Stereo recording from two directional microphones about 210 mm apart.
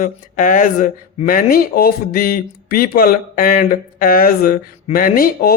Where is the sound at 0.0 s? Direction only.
40° left (ahead or behind).